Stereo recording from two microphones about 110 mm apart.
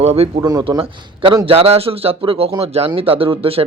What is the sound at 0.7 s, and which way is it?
Speech, 50° right (ahead or behind).